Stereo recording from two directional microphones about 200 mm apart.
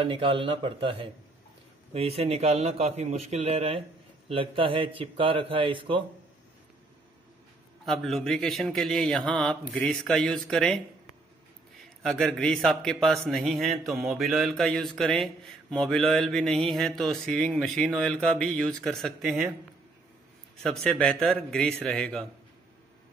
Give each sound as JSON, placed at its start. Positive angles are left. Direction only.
{"t": 0.0, "sound": "a man's voice", "side_deg": -25}
{"t": 7.8, "sound": "a man's voice", "side_deg": 0}
{"t": 12.0, "sound": "a man's voice", "side_deg": 0}
{"t": 20.5, "sound": "a man's voice", "side_deg": 0}